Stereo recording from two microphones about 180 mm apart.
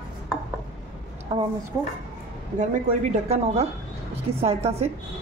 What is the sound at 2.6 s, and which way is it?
A woman's voice, 45° right (ahead or behind).